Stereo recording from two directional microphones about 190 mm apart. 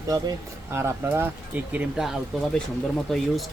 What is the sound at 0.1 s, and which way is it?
Speech, 15° right (ahead or behind).